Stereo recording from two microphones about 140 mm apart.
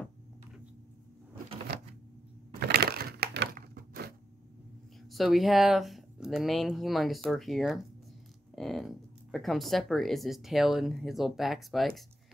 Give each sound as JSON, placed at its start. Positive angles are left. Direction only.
{"t": 2.7, "sound": "crushing", "side_deg": -90}
{"t": 5.1, "sound": "speech", "side_deg": 0}